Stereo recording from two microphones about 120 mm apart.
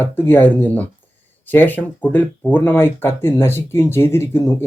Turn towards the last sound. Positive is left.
turn(degrees=20)  # may be behind; listen again after turning